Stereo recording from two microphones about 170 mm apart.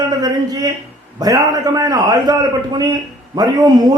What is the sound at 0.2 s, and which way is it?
A man's voice, 20° right (ahead or behind).